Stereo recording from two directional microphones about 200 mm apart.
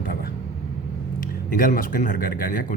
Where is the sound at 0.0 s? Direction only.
50° left (ahead or behind).